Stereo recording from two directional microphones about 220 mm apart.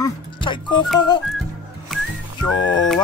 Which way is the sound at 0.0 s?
20° left (ahead or behind).